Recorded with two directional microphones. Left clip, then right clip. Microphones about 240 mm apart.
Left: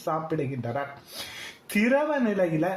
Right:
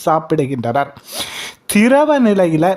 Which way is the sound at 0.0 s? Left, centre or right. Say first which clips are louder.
Right 13 dB; right.